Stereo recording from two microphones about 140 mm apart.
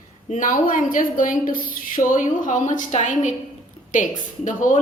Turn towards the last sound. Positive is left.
turn(degrees=65)  # may be behind; listen again after turning